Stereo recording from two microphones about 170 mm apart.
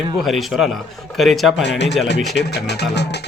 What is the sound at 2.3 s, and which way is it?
Speech, 75° left (ahead or behind).